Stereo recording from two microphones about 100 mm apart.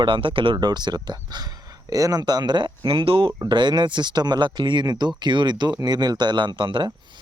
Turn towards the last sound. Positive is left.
turn(degrees=-55)  # may be behind; listen again after turning